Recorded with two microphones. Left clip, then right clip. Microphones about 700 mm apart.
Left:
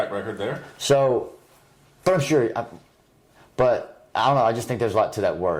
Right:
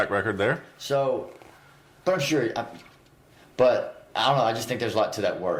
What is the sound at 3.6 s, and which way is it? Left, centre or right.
Speech, left.